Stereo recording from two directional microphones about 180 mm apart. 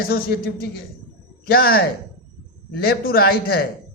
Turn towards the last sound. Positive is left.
turn(degrees=55)  # may be behind; listen again after turning